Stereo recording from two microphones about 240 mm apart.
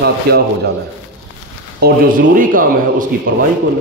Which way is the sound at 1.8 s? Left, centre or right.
Right.